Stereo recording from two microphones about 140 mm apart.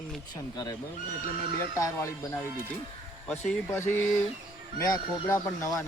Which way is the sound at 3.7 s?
20° left (ahead or behind).